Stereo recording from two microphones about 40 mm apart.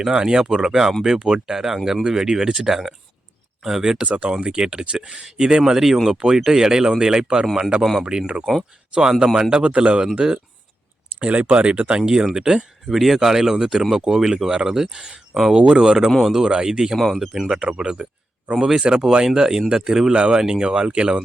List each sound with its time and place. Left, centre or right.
0.0 s speech: centre
4.0 s speech: right
4.3 s speech: right
8.3 s speech: right
9.0 s speech: centre
12.3 s speech: centre
12.9 s speech: centre
17.5 s speech: centre